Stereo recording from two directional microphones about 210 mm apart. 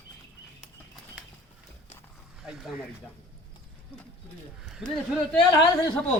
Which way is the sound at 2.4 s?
Centre (ahead or behind).